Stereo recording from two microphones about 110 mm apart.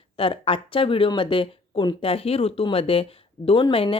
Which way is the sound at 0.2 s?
55° left (ahead or behind).